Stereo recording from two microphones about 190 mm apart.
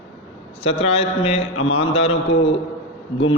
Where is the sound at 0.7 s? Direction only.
30° left (ahead or behind).